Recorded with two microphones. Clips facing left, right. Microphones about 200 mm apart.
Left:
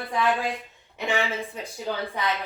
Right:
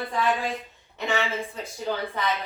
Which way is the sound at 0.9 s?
15° left (ahead or behind).